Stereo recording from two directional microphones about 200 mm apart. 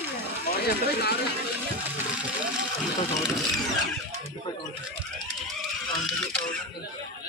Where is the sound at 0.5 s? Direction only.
55° left (ahead or behind).